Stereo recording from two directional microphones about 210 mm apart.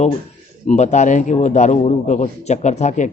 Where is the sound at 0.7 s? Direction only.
35° left (ahead or behind).